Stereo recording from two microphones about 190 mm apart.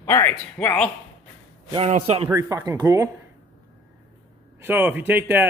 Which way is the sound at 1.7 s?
35° right (ahead or behind).